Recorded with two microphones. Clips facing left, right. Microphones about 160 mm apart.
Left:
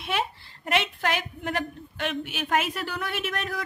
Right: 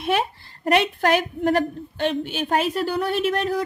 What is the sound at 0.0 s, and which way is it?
A woman's voice, 40° right (ahead or behind).